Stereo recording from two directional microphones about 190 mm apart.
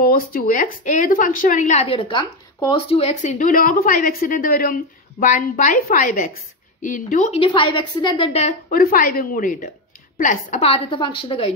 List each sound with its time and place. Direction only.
0.0 s a woman's voice: 50° left (ahead or behind); by 2.7 s 20° left (ahead or behind)
2.9 s a woman's voice: 30° left (ahead or behind)
8.7 s a woman's voice: 50° left (ahead or behind); by 11.5 s 30° left (ahead or behind)